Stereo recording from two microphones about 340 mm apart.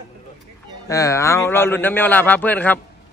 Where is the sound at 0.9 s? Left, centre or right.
Centre.